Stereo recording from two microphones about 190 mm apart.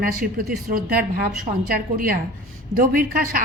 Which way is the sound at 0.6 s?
50° right (ahead or behind).